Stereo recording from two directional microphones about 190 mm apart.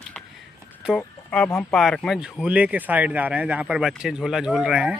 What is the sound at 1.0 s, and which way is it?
Speech, 5° left (ahead or behind).